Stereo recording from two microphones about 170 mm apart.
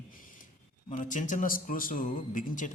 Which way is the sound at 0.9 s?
50° left (ahead or behind).